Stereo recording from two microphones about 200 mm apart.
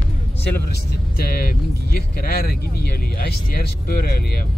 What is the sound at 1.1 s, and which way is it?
Speech, 50° left (ahead or behind).